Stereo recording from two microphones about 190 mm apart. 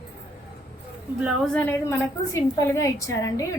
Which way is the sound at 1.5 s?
10° left (ahead or behind).